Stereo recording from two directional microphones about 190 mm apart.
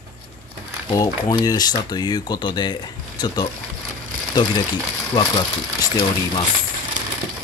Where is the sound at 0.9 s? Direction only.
20° left (ahead or behind).